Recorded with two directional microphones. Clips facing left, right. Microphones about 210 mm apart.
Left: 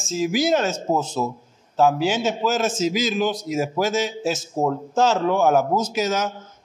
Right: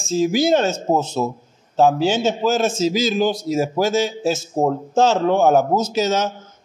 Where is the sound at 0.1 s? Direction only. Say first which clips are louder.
Right 4 dB; 30° right (ahead or behind).